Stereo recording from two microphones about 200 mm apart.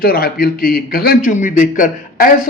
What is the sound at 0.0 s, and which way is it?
Speech, 50° left (ahead or behind).